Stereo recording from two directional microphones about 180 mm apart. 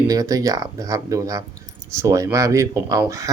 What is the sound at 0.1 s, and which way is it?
Speech, 20° right (ahead or behind).